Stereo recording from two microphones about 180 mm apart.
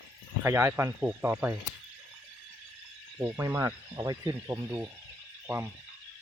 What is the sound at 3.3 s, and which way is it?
Speech, 15° right (ahead or behind).